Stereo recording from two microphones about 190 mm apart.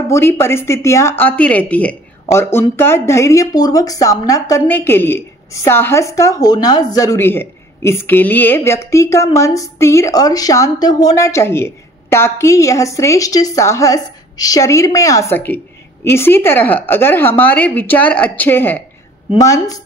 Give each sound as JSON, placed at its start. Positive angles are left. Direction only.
{"t": 0.1, "sound": "speech", "side_deg": 15}